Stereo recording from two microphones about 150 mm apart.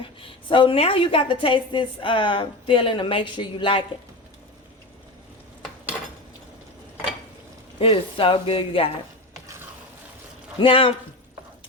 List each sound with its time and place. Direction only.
0.0 s a woman's voice: 35° left (ahead or behind)
7.8 s a woman's voice: 40° left (ahead or behind)
10.6 s a woman's voice: 35° left (ahead or behind)